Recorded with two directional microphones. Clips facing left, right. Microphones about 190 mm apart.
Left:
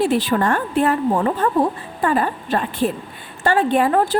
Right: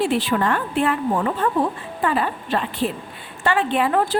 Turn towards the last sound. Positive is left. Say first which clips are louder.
# left 3 dB
turn(degrees=40)  # may be behind; listen again after turning